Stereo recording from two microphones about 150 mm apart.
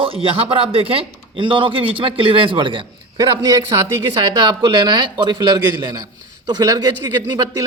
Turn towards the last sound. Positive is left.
turn(degrees=-25)  # may be behind; listen again after turning